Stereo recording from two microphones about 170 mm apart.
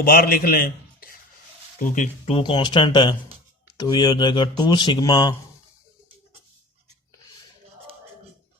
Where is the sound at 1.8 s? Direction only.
50° left (ahead or behind); by 5.3 s 20° left (ahead or behind).